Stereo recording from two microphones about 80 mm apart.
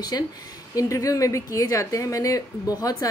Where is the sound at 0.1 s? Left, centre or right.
Left.